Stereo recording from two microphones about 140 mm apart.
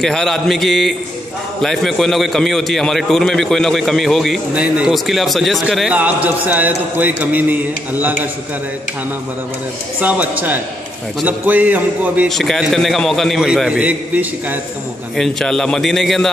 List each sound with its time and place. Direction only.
0.0 s a man's voice: 5° left (ahead or behind); by 8.2 s 15° right (ahead or behind)
9.9 s a man's voice: 10° right (ahead or behind)
12.3 s a man's voice: 5° left (ahead or behind)
15.1 s a man's voice: 5° left (ahead or behind)